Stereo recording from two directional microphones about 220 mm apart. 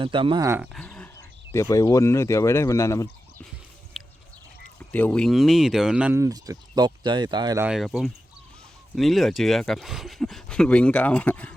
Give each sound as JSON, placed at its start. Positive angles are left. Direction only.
{"t": 0.0, "sound": "speech", "side_deg": -20}
{"t": 0.7, "sound": "a sound", "side_deg": 5}
{"t": 1.5, "sound": "speech", "side_deg": 15}
{"t": 3.9, "sound": "a sound", "side_deg": 0}
{"t": 4.8, "sound": "speech", "side_deg": 5}
{"t": 7.7, "sound": "speech", "side_deg": 0}